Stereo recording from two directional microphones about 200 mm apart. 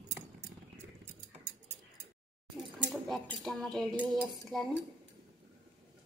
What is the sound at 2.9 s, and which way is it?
Cutlery, centre (ahead or behind).